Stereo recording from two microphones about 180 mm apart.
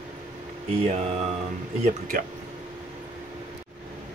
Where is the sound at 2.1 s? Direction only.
50° right (ahead or behind).